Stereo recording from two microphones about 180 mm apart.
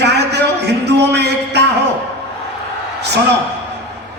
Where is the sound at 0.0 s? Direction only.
70° right (ahead or behind).